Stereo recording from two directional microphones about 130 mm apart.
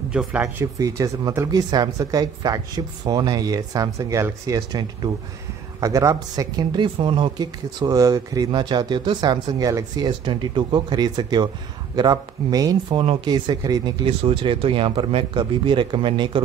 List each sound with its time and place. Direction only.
0.1 s speech: 10° right (ahead or behind)
0.7 s speech: 25° right (ahead or behind)
13.0 s speech: 40° right (ahead or behind)
14.0 s speech: 45° right (ahead or behind)